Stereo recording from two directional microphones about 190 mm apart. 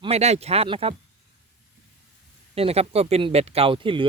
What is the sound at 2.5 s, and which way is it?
Speech, 30° right (ahead or behind).